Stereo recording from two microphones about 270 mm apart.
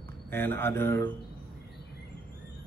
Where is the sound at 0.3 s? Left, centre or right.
Centre.